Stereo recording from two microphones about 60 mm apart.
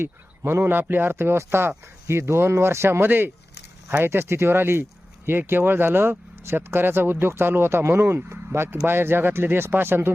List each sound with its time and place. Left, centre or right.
0.0 s speech: right
3.1 s speech: right